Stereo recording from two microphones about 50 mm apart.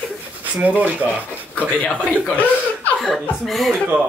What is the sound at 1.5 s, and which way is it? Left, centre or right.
Speech, left.